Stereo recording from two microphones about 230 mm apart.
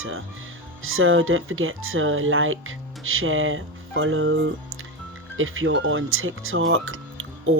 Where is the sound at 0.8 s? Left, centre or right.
Right.